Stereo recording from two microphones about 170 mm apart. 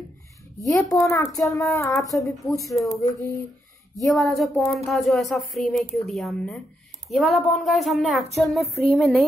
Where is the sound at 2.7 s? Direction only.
Centre (ahead or behind).